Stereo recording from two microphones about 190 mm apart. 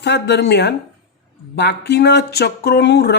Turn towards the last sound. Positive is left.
turn(degrees=60)  # may be behind; listen again after turning